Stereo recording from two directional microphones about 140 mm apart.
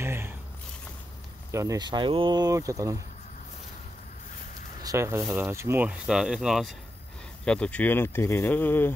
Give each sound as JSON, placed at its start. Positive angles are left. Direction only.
{"t": 0.0, "sound": "a sound", "side_deg": -20}
{"t": 1.5, "sound": "speech", "side_deg": -20}
{"t": 4.8, "sound": "speech", "side_deg": -20}
{"t": 5.9, "sound": "speech", "side_deg": -5}
{"t": 7.4, "sound": "speech", "side_deg": 5}